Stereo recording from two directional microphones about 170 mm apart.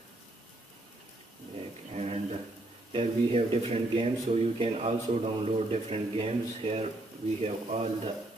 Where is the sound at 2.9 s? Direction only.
35° right (ahead or behind).